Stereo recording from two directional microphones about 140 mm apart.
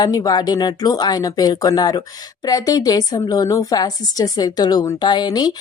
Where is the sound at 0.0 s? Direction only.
25° left (ahead or behind).